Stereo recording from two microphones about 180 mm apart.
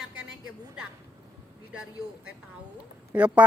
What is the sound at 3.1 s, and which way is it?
Speech, 5° right (ahead or behind).